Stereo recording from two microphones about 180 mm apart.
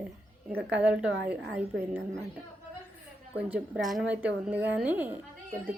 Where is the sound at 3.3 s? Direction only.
10° right (ahead or behind).